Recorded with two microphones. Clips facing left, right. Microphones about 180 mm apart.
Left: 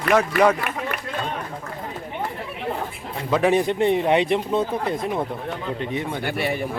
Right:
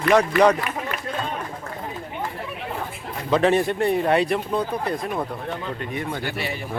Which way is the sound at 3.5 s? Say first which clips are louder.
Left 1 dB; 20° left (ahead or behind).